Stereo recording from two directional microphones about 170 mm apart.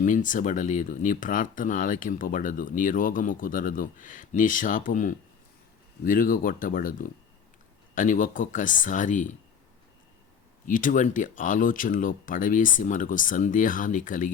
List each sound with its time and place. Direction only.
0.0 s speech: 50° left (ahead or behind)
10.7 s speech: 50° left (ahead or behind)